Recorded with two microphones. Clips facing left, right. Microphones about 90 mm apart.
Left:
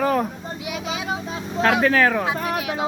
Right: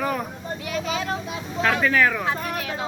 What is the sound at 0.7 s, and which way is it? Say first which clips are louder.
Speech: right 1 dB; 10° left (ahead or behind).